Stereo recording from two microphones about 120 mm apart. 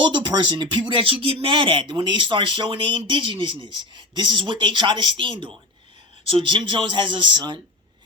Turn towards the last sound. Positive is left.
turn(degrees=-40)  # may be behind; listen again after turning